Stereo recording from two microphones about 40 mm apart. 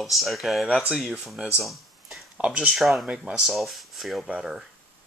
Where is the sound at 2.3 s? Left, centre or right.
Right.